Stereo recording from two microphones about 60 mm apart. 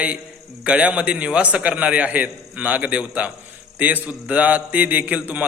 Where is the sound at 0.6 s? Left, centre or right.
Centre.